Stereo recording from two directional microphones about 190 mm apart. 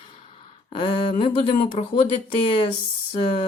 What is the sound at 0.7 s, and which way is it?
Speech, 25° left (ahead or behind).